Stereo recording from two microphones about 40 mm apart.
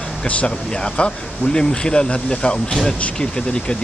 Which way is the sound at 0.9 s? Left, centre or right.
Left.